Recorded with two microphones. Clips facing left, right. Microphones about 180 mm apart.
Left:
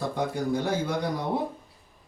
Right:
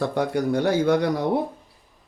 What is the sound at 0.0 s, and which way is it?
A man's voice, 75° right (ahead or behind).